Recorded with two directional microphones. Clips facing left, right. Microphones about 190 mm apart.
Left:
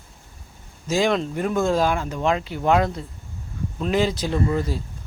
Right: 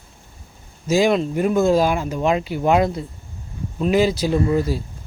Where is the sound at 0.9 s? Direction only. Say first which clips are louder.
Right 4 dB; 10° right (ahead or behind).